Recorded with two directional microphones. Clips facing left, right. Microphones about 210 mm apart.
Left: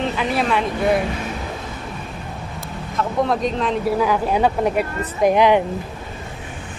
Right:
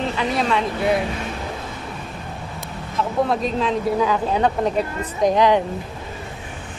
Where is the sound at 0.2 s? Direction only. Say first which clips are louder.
Even; 5° left (ahead or behind).